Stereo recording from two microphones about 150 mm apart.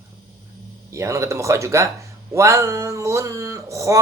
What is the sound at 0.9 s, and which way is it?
Speech, 20° right (ahead or behind).